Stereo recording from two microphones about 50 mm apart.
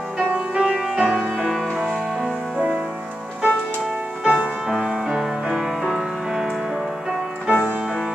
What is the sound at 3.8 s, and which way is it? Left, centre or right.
Music, centre.